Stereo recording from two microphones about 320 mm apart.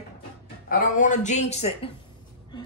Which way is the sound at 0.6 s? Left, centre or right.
Left.